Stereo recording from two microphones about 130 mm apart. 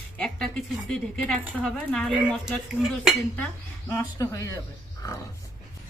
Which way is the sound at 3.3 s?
15° left (ahead or behind).